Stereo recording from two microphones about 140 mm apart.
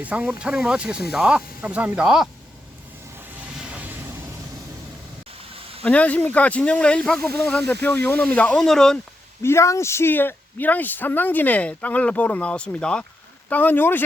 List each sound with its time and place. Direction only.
0.0 s speech: 10° right (ahead or behind)
3.4 s vehicle: 10° right (ahead or behind)
5.5 s a sound: 40° right (ahead or behind)
5.8 s speech: 10° left (ahead or behind)
9.4 s speech: 20° left (ahead or behind)